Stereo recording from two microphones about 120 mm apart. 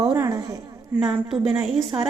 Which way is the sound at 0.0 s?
30° right (ahead or behind).